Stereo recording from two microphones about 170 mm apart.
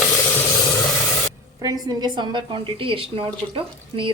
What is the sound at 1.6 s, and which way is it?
A woman's voice, 20° right (ahead or behind).